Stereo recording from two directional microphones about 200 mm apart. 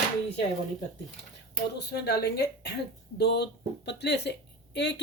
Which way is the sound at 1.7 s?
55° left (ahead or behind).